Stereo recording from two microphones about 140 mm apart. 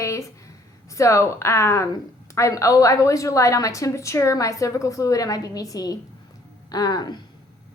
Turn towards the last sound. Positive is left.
turn(degrees=30)  # may be behind; listen again after turning